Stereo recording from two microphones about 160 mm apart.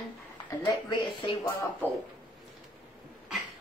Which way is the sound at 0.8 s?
30° left (ahead or behind).